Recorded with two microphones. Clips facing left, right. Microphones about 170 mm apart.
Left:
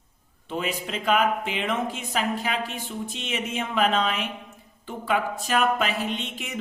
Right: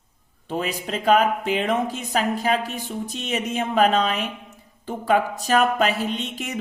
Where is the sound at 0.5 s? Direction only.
40° right (ahead or behind).